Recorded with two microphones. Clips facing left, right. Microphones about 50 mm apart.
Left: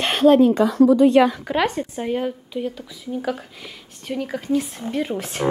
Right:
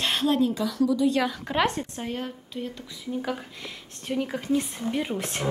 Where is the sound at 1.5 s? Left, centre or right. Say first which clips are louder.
Left 4 dB; centre.